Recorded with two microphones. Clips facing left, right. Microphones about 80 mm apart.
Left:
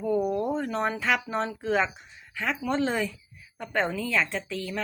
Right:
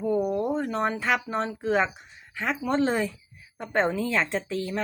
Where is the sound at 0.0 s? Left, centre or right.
Centre.